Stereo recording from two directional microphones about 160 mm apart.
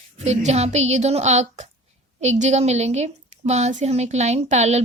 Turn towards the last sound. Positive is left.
turn(degrees=-45)  # may be behind; listen again after turning